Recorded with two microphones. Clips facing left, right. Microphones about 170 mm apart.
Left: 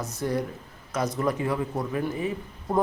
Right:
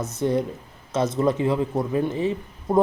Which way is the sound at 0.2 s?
20° right (ahead or behind).